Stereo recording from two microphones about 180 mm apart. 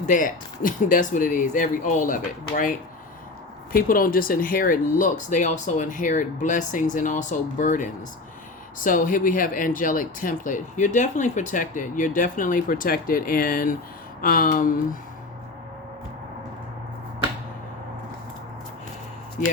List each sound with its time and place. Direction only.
0.0 s speech: 45° left (ahead or behind)
3.7 s speech: 50° left (ahead or behind)